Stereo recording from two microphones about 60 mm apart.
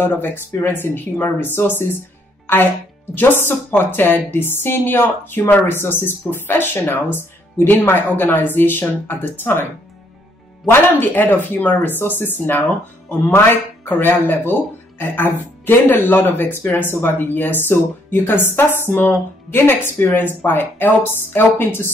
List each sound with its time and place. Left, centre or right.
0.0 s speech: left
2.4 s music: left
3.4 s speech: left
13.8 s speech: left